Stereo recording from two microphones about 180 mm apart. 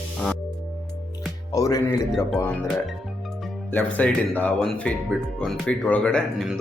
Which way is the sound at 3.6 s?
10° left (ahead or behind).